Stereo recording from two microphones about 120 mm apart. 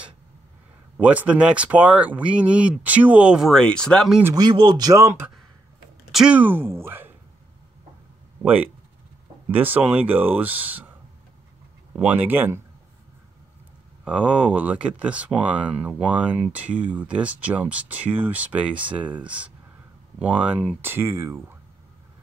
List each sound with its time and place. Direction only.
0.9 s speech: 10° right (ahead or behind); by 4.1 s 5° left (ahead or behind)
4.4 s speech: 40° right (ahead or behind); by 5.3 s 20° right (ahead or behind)
6.1 s speech: 10° right (ahead or behind)
9.6 s speech: 15° right (ahead or behind)
11.9 s speech: 10° right (ahead or behind)
14.0 s speech: 5° right (ahead or behind)